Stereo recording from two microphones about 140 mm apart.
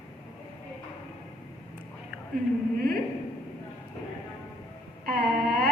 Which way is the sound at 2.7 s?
90° right.